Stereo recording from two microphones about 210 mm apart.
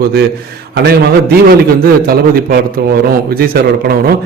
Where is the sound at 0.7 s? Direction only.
50° right (ahead or behind).